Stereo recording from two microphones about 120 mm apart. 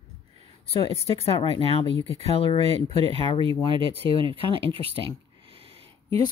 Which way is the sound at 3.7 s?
45° right (ahead or behind).